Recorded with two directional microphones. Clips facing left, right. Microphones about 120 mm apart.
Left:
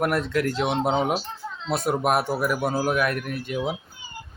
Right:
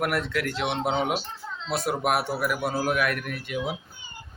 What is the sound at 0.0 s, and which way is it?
Speech, 35° left (ahead or behind).